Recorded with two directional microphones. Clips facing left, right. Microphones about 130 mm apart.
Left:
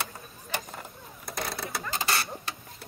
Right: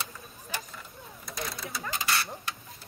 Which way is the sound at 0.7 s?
55° left (ahead or behind).